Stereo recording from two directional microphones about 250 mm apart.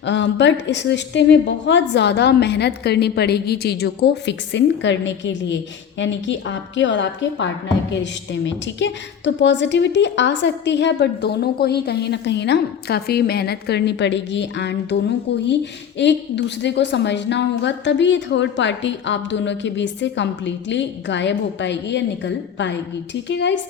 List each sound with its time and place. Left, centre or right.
0.0 s a woman's voice: left